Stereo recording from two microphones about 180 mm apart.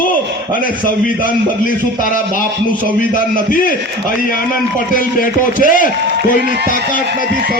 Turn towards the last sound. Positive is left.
turn(degrees=50)  # may be behind; listen again after turning